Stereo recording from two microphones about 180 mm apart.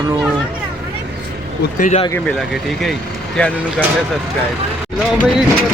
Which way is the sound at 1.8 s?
40° left (ahead or behind).